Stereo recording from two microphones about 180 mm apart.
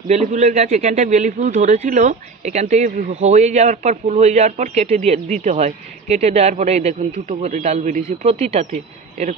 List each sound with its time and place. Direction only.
0.1 s speech: 40° right (ahead or behind)